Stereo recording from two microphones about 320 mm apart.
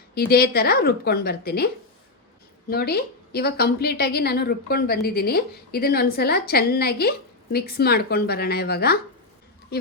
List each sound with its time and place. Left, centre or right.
0.1 s a woman's voice: left